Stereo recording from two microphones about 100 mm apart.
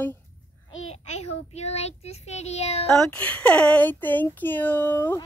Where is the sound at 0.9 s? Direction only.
90° left.